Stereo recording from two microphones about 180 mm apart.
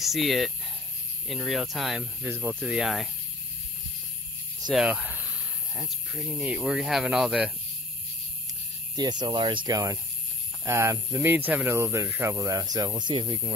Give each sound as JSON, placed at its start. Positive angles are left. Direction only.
{"t": 0.0, "sound": "speech", "side_deg": 0}
{"t": 4.6, "sound": "speech", "side_deg": -5}
{"t": 8.9, "sound": "speech", "side_deg": -25}